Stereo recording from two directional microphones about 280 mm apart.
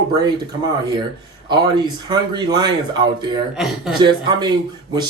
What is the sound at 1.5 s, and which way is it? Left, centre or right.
Speech, centre.